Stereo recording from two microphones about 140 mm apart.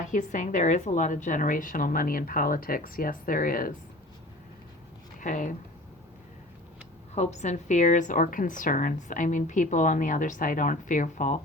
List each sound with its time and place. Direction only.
0.0 s a woman's voice: 65° left (ahead or behind); by 3.8 s 85° left
5.2 s a woman's voice: 65° left (ahead or behind)
7.2 s a woman's voice: 55° left (ahead or behind)